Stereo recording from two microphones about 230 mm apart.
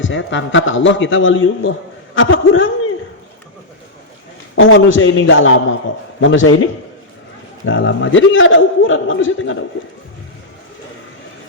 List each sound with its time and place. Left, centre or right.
0.0 s a man's voice: left
4.5 s a man's voice: left